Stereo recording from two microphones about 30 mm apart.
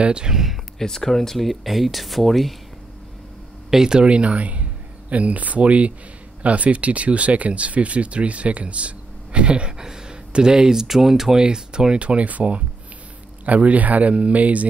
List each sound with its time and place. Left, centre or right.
0.0 s speech: right
0.3 s speech: centre
0.7 s speech: centre
3.7 s speech: right
4.0 s speech: right
9.8 s speech: right
10.9 s speech: centre
11.3 s speech: right
12.0 s speech: right
13.5 s a man's voice: right
14.1 s speech: right